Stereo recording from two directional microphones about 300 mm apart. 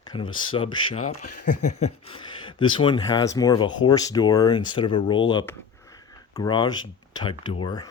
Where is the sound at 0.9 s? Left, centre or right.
Left.